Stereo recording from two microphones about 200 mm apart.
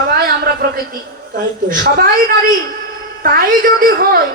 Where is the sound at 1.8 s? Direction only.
50° right (ahead or behind).